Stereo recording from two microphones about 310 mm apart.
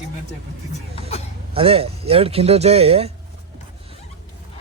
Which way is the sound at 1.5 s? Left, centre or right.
Centre.